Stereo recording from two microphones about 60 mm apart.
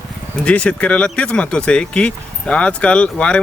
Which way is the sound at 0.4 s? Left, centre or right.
Left.